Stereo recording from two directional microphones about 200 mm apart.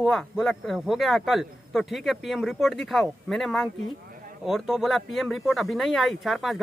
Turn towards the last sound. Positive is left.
turn(degrees=0)  # may be behind; listen again after turning